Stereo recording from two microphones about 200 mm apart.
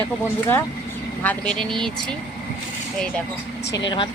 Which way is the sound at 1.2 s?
5° left (ahead or behind).